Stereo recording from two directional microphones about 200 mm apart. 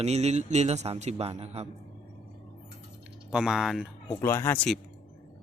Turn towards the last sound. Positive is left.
turn(degrees=5)  # may be behind; listen again after turning